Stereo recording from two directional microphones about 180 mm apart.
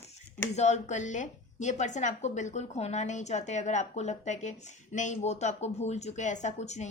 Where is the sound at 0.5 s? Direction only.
40° left (ahead or behind).